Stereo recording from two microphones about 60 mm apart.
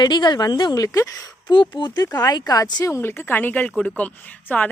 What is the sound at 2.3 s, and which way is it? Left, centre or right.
Speech, left.